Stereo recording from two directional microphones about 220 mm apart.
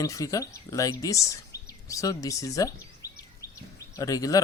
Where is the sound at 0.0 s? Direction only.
15° left (ahead or behind).